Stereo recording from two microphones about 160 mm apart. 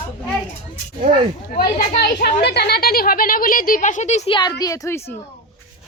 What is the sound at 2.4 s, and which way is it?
Speech, 90° left.